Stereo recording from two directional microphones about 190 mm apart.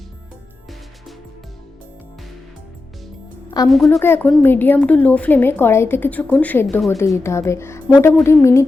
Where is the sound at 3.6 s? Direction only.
20° left (ahead or behind).